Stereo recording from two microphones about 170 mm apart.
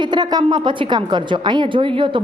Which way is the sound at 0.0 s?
25° right (ahead or behind).